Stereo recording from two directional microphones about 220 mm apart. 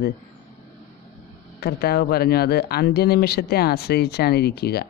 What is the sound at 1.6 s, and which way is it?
Speech, 45° left (ahead or behind).